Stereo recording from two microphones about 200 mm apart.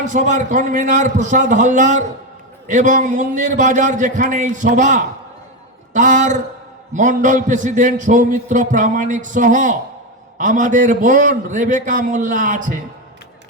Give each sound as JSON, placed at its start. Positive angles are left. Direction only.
{"t": 0.0, "sound": "a man's voice", "side_deg": -40}